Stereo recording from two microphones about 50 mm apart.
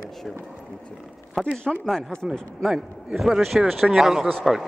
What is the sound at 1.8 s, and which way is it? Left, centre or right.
Speech, centre.